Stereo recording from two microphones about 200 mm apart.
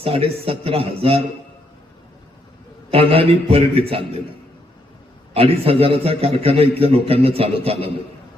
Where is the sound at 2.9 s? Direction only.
30° right (ahead or behind).